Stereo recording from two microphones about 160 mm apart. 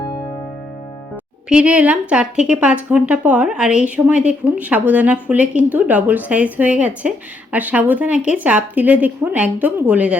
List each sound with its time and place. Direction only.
1.5 s speech: 5° right (ahead or behind)